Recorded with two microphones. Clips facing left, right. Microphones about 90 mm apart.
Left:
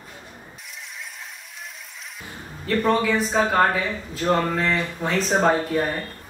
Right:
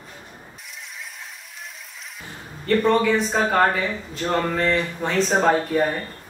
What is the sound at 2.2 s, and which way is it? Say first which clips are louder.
Speech: left 1 dB; 5° left (ahead or behind).